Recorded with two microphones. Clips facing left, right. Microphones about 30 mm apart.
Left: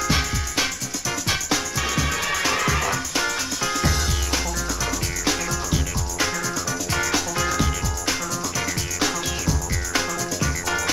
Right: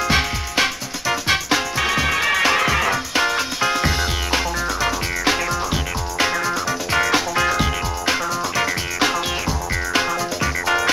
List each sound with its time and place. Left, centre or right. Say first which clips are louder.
0.1 s music: right 4 dB; right